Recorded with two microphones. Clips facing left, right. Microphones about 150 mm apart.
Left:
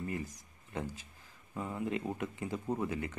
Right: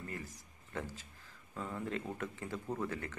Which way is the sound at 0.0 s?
15° left (ahead or behind).